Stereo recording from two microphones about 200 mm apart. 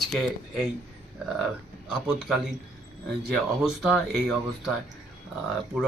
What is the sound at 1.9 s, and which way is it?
Speech, 5° right (ahead or behind).